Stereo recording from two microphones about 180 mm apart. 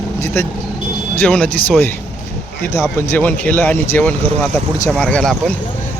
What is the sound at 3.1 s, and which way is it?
Speech, 10° left (ahead or behind).